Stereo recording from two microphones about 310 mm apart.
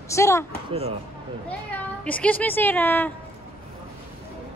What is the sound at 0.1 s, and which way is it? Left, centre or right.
Speech, centre.